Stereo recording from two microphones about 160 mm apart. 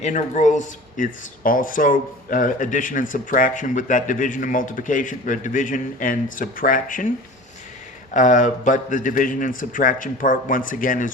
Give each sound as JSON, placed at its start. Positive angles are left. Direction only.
{"t": 0.0, "sound": "speech", "side_deg": 45}
{"t": 8.1, "sound": "speech", "side_deg": 50}